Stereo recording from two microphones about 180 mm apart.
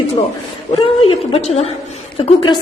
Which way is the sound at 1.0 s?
35° left (ahead or behind).